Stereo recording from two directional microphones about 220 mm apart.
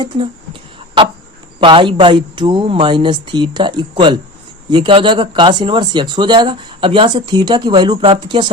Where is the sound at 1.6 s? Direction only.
20° right (ahead or behind).